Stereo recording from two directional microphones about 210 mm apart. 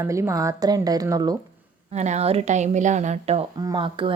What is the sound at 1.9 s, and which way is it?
A woman's voice, 35° right (ahead or behind).